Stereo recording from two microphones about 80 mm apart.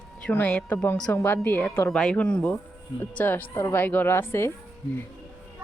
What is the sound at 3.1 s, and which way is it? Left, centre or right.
A woman's voice, left.